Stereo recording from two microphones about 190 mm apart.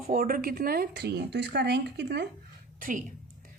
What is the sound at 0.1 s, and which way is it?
Speech, 50° right (ahead or behind).